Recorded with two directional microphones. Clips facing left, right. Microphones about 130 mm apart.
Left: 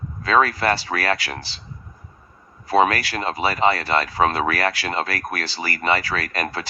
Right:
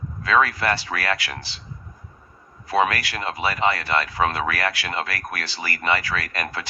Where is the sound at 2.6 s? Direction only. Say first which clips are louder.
Left 3 dB; 35° left (ahead or behind).